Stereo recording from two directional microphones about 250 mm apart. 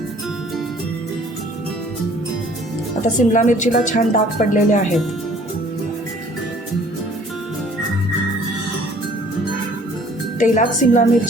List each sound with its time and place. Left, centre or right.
3.2 s speech: left
10.4 s speech: left